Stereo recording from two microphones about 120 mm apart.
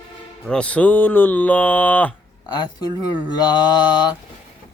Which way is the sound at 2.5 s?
35° left (ahead or behind).